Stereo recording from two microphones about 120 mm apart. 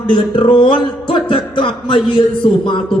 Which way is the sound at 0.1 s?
50° left (ahead or behind).